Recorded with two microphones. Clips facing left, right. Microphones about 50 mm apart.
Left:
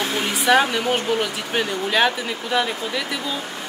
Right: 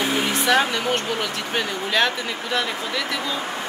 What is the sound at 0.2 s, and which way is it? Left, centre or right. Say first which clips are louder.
Speech: left 4 dB; centre.